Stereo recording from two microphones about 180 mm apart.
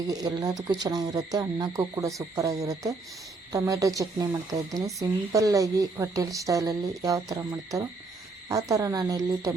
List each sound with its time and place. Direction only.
0.1 s speech: 20° right (ahead or behind)